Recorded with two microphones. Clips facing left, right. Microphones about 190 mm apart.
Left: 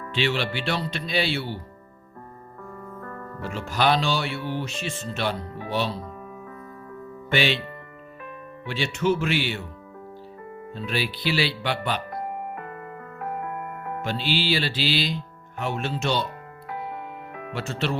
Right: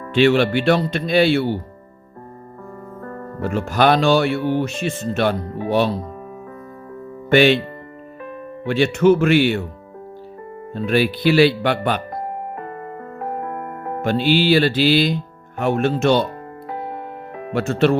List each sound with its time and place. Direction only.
0.1 s speech: 50° right (ahead or behind)
3.4 s speech: 50° right (ahead or behind)
7.3 s speech: 50° right (ahead or behind)
8.6 s speech: 55° right (ahead or behind)
10.8 s speech: 50° right (ahead or behind)
13.1 s music: 35° right (ahead or behind)
14.0 s speech: 50° right (ahead or behind)
16.6 s music: 35° right (ahead or behind)
17.5 s speech: 55° right (ahead or behind)